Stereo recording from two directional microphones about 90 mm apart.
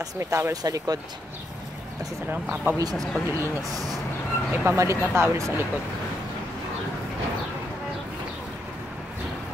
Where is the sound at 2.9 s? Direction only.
5° left (ahead or behind).